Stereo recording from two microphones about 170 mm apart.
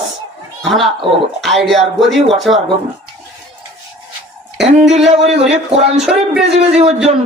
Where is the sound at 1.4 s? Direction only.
Centre (ahead or behind).